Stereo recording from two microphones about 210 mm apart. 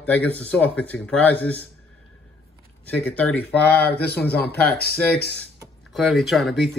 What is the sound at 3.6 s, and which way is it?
Speech, 50° left (ahead or behind).